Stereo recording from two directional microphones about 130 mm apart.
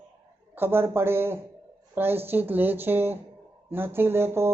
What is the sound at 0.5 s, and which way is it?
Speech, 15° right (ahead or behind).